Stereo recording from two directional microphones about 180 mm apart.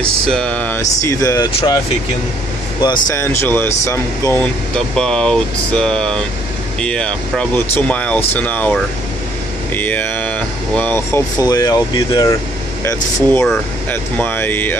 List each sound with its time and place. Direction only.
0.0 s speech: 5° left (ahead or behind); by 1.8 s 25° left (ahead or behind)
3.1 s speech: 15° left (ahead or behind)
9.8 s speech: 10° left (ahead or behind)
12.8 s speech: 15° left (ahead or behind)